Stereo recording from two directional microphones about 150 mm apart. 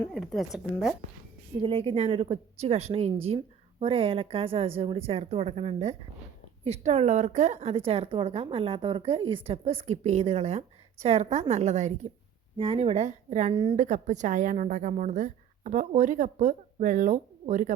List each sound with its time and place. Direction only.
0.1 s a woman's voice: centre (ahead or behind)
1.6 s a woman's voice: 40° right (ahead or behind)
12.5 s speech: 35° right (ahead or behind); by 13.5 s 50° right (ahead or behind)
13.5 s a woman's voice: 35° right (ahead or behind)
13.7 s a woman's voice: 55° right (ahead or behind)